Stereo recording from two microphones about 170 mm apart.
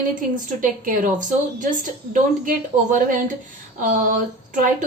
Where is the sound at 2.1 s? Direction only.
50° right (ahead or behind).